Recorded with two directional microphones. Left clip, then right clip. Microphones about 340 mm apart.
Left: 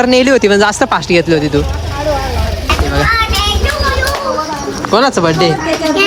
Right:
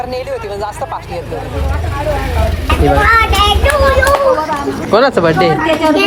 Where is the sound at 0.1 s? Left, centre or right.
Left.